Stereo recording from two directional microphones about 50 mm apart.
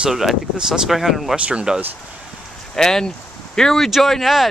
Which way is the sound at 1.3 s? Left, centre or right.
Right.